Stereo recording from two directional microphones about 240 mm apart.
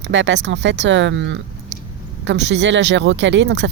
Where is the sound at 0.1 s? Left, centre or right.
Right.